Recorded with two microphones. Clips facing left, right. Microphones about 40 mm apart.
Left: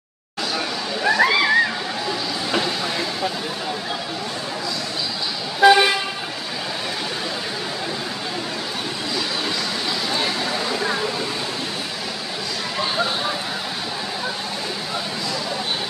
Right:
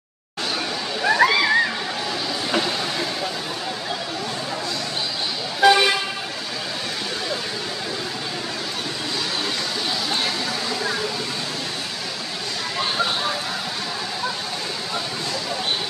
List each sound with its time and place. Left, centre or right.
1.0 s splash: centre
5.6 s toot: centre
10.2 s a sound: centre